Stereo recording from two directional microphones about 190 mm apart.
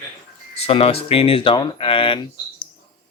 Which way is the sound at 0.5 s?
30° left (ahead or behind).